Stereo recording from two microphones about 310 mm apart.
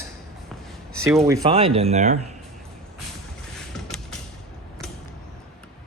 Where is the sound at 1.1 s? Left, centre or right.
Centre.